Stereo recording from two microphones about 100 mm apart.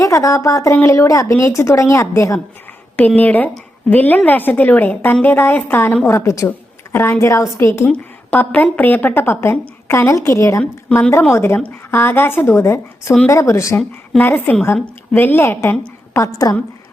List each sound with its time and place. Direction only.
0.0 s speech: 30° left (ahead or behind)
3.2 s a woman's voice: 15° left (ahead or behind)
7.9 s speech: 15° left (ahead or behind); by 13.7 s 30° left (ahead or behind)
14.2 s speech: 20° left (ahead or behind)
16.1 s speech: 35° left (ahead or behind)